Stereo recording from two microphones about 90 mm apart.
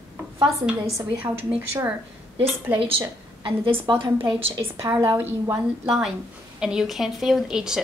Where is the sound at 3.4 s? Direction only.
70° right (ahead or behind); by 4.5 s 85° right.